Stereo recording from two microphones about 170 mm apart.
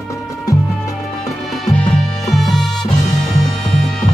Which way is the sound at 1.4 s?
Centre (ahead or behind).